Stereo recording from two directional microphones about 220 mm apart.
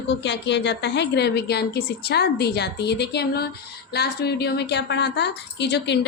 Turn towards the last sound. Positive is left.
turn(degrees=50)  # may be behind; listen again after turning